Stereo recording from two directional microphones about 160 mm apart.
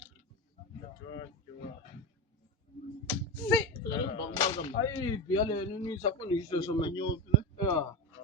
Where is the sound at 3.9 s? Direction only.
20° left (ahead or behind).